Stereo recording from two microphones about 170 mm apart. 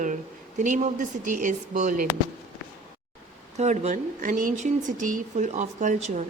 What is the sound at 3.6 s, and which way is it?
Speech, 45° right (ahead or behind).